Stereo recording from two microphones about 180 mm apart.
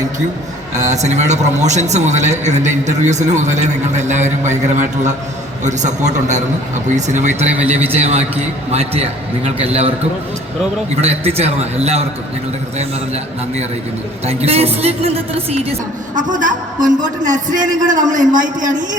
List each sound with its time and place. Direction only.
0.8 s a man's voice: 40° right (ahead or behind)
11.0 s a man's voice: 35° right (ahead or behind)
14.3 s a man's voice: 35° right (ahead or behind)
16.1 s a man's voice: 45° right (ahead or behind)